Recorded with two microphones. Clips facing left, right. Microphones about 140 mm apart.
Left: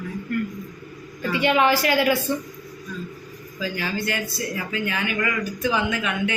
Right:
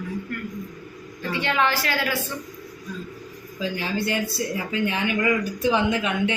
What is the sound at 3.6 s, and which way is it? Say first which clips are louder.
Speech: right 1 dB; 25° right (ahead or behind).